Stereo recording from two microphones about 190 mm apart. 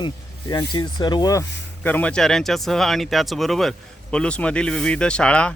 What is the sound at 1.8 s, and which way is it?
Speech, 5° left (ahead or behind).